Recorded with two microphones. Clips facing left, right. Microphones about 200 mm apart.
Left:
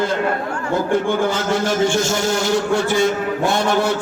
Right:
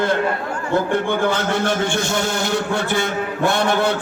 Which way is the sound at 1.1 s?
60° right (ahead or behind).